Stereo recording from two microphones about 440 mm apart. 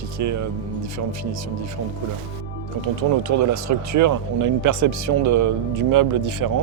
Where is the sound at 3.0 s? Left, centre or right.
Right.